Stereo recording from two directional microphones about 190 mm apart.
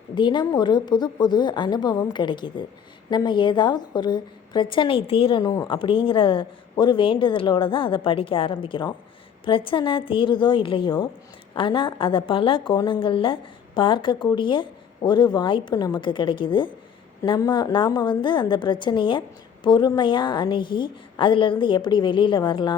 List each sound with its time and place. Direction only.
0.1 s a woman's voice: 25° left (ahead or behind)